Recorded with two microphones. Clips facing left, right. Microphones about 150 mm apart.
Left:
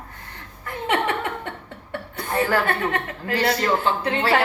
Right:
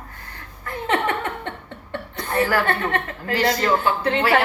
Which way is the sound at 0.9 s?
15° left (ahead or behind).